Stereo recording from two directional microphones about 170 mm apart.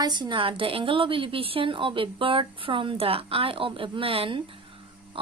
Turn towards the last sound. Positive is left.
turn(degrees=-30)  # may be behind; listen again after turning